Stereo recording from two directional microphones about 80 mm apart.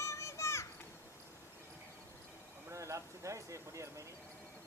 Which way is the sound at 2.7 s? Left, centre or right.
Right.